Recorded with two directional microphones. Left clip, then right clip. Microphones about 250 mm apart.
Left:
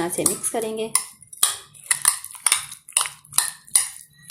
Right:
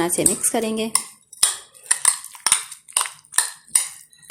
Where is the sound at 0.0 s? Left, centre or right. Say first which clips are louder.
Right 3 dB; centre.